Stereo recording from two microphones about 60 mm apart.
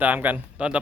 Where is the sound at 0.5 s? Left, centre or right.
Centre.